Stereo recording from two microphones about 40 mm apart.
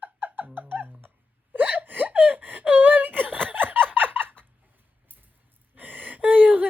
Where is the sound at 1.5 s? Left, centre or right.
Right.